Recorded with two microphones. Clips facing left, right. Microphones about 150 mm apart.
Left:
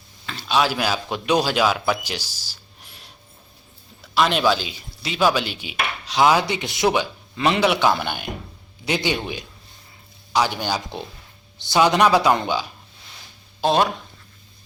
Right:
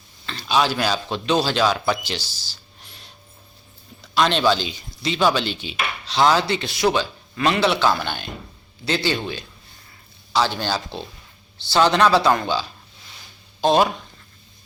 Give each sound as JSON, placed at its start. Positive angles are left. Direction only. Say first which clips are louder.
{"t": 0.3, "sound": "speech", "louder": "even", "side_deg": 0}
{"t": 4.1, "sound": "chopping", "louder": "even", "side_deg": 10}
{"t": 13.6, "sound": "speech", "louder": "right 2 dB", "side_deg": 0}